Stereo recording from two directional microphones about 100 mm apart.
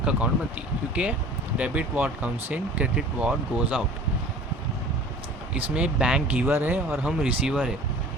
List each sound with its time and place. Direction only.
0.0 s speech: 10° right (ahead or behind)
5.5 s speech: 15° right (ahead or behind)